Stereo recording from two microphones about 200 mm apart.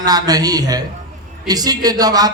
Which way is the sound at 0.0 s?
20° right (ahead or behind).